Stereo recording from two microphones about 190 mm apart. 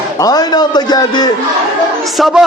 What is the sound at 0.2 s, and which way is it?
A man's voice, 20° left (ahead or behind).